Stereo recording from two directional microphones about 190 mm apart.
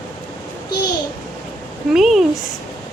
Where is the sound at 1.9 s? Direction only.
Centre (ahead or behind).